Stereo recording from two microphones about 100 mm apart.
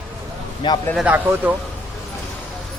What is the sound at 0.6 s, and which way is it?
Speech, 50° left (ahead or behind).